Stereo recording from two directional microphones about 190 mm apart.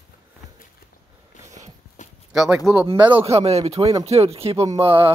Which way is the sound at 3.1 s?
30° right (ahead or behind).